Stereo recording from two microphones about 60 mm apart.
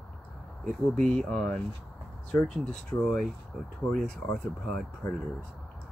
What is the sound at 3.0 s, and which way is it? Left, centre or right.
Speech, centre.